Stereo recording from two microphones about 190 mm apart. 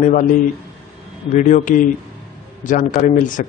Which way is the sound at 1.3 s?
40° left (ahead or behind).